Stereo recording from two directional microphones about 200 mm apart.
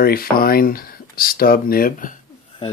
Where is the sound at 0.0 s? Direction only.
50° left (ahead or behind).